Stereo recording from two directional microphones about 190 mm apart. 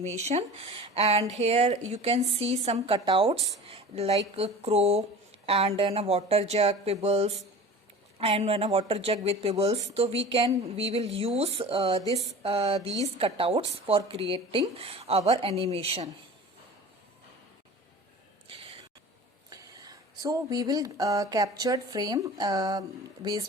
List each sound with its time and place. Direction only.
0.3 s speech: 35° right (ahead or behind)
12.4 s a sound: 30° right (ahead or behind)
13.1 s speech: 30° right (ahead or behind)
19.5 s speech: 20° right (ahead or behind)